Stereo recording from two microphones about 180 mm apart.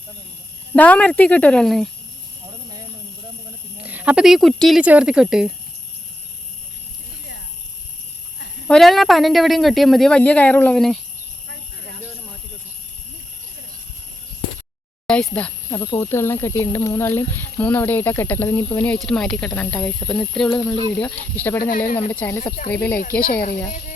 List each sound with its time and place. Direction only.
0.7 s speech: 10° left (ahead or behind)
3.8 s speech: 10° right (ahead or behind)
8.6 s speech: 5° left (ahead or behind)
11.4 s a sound: 75° right (ahead or behind)
15.0 s speech: 5° left (ahead or behind)
18.9 s speech: 5° left (ahead or behind)
21.6 s speech: 50° left (ahead or behind)
22.1 s speech: 10° left (ahead or behind)
23.2 s speech: 55° left (ahead or behind)